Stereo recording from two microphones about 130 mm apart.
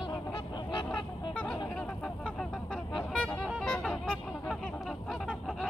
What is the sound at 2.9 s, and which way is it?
Vehicle, 5° left (ahead or behind).